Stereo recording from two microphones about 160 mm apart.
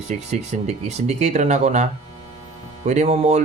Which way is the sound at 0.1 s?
45° right (ahead or behind).